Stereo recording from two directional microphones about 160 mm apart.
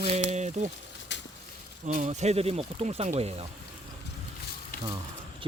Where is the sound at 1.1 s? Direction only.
90° left.